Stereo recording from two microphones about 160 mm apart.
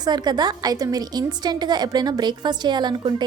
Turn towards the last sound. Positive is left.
turn(degrees=-25)  # may be behind; listen again after turning